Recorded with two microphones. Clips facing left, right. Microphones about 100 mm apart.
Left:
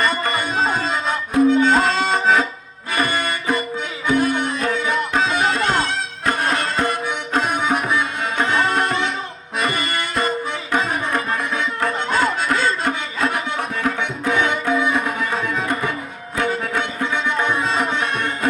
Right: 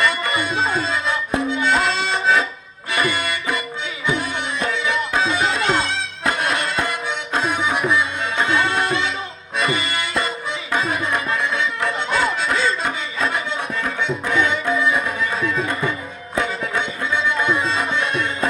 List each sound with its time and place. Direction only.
0.0 s music: 40° left (ahead or behind)
16.4 s music: 50° left (ahead or behind)